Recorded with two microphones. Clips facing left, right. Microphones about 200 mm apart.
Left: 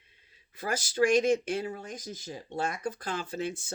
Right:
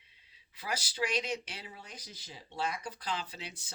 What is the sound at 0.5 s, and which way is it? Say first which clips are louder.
Speech: left 7 dB; 50° left (ahead or behind).